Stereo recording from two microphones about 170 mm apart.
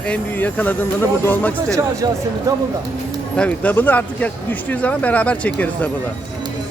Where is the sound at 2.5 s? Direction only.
20° right (ahead or behind).